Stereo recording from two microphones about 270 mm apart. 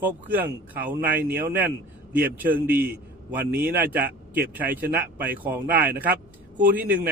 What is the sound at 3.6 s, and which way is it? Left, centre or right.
Speech, right.